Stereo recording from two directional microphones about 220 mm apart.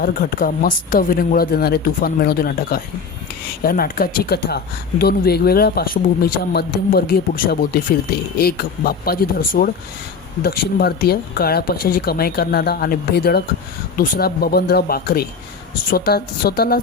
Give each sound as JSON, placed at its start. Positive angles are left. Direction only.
{"t": 0.0, "sound": "speech", "side_deg": 40}